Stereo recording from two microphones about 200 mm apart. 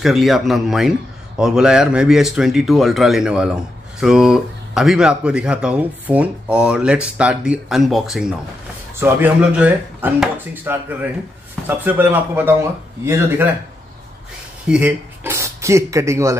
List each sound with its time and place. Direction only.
0.0 s speech: centre (ahead or behind)
14.7 s speech: 10° right (ahead or behind)